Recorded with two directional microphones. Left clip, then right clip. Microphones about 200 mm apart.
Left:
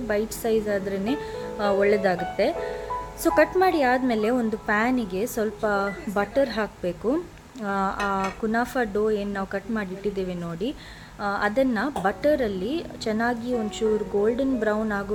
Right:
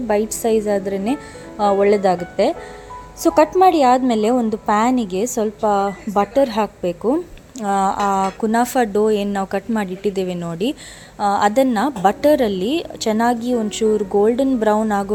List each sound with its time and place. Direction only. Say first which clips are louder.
0.1 s a woman's voice: right 7 dB; 30° right (ahead or behind)